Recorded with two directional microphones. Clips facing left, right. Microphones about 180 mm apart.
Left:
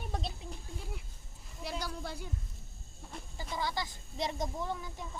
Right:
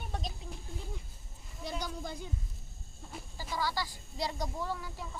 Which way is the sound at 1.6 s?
5° left (ahead or behind).